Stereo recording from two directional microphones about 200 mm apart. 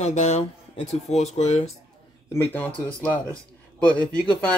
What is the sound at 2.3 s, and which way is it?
Speech, 10° left (ahead or behind).